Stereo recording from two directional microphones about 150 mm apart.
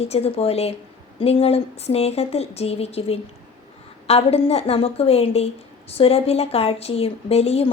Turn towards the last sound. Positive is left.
turn(degrees=45)  # may be behind; listen again after turning